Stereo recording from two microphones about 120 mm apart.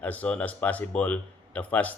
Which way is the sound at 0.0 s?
10° left (ahead or behind).